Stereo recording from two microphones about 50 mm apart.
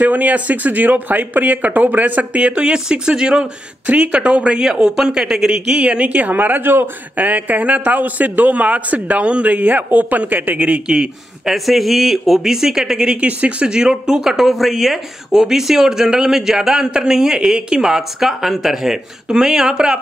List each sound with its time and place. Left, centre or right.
0.0 s a man's voice: right
11.4 s speech: centre